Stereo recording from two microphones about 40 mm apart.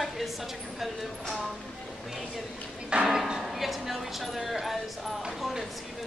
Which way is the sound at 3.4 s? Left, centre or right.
Centre.